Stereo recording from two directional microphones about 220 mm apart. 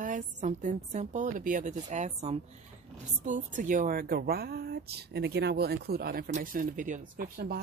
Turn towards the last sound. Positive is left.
turn(degrees=-40)  # may be behind; listen again after turning